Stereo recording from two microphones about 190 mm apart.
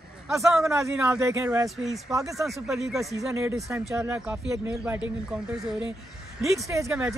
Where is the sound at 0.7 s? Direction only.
15° right (ahead or behind).